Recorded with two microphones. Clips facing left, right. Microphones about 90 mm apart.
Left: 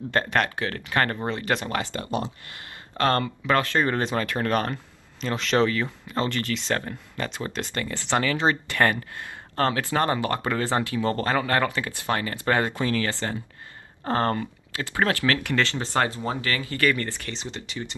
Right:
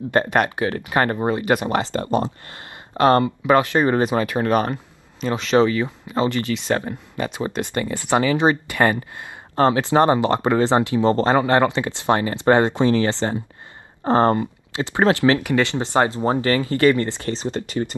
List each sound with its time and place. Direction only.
0.1 s speech: 15° right (ahead or behind)
1.8 s speech: 35° right (ahead or behind)
3.0 s speech: 15° right (ahead or behind)
16.2 s speech: 35° right (ahead or behind)
17.3 s speech: 40° right (ahead or behind)